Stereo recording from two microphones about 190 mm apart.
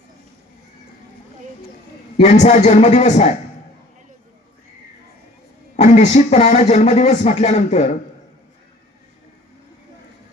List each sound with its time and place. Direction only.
2.1 s speech: 35° left (ahead or behind)
5.7 s speech: 35° left (ahead or behind)